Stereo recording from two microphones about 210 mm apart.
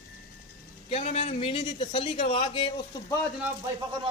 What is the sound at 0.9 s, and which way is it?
A man's voice, 30° left (ahead or behind).